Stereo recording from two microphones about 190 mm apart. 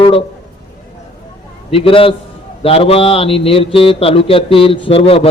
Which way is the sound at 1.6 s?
30° left (ahead or behind).